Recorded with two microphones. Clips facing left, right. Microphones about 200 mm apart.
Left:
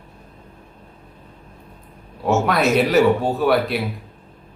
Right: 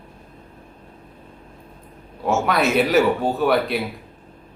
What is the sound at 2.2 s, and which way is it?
Speech, centre (ahead or behind).